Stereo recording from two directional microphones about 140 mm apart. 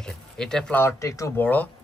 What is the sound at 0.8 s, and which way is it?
Speech, 20° left (ahead or behind).